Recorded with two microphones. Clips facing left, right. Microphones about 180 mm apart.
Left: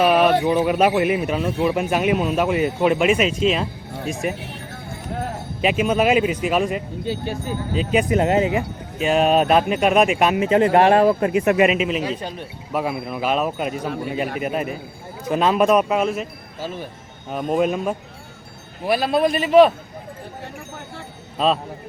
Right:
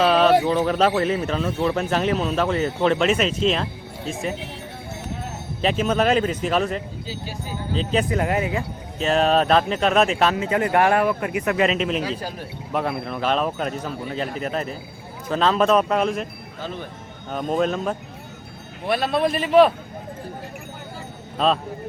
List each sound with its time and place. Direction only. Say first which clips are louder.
0.0 s a sound: left 1 dB; 10° left (ahead or behind)
0.4 s a man's voice: left 2 dB; 10° left (ahead or behind)
5.6 s a man's voice: left 2 dB; 10° left (ahead or behind)
7.0 s speech: left 7 dB; 55° left (ahead or behind)
7.7 s a man's voice: left 2 dB; 10° left (ahead or behind)
8.1 s speech: left 5 dB; 25° left (ahead or behind)
9.0 s a man's voice: left 2 dB; 10° left (ahead or behind); by 11.6 s 25° left (ahead or behind)
11.6 s a man's voice: left 3 dB; 10° left (ahead or behind)
12.7 s a man's voice: left 1 dB; 5° left (ahead or behind)
21.3 s speech: left 1 dB; 5° left (ahead or behind)